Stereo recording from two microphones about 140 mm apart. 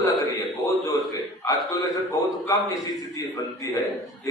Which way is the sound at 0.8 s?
25° left (ahead or behind).